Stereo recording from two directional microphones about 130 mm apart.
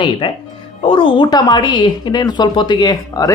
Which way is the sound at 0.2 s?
40° left (ahead or behind).